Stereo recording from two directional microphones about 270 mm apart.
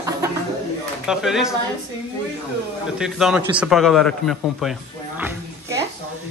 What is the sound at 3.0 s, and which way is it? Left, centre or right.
A man's voice, centre.